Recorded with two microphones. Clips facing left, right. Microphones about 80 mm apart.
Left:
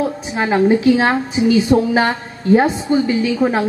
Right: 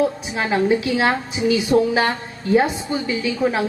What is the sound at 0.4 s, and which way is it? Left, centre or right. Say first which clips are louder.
A woman's voice: left 4 dB; left.